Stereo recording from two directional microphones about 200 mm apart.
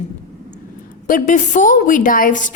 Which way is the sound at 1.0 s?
40° left (ahead or behind).